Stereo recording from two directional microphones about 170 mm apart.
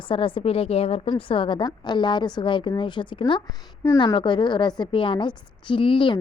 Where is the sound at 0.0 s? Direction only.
30° left (ahead or behind).